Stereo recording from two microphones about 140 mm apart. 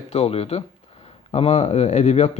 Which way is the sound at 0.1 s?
50° left (ahead or behind).